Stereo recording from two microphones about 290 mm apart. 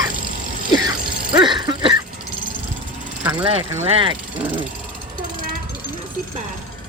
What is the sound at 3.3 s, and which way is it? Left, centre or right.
Speech, centre.